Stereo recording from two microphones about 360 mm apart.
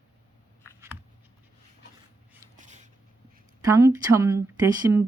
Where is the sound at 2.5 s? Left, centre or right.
Right.